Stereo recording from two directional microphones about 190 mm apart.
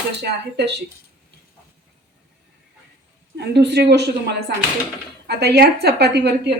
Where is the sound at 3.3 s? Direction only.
60° right (ahead or behind).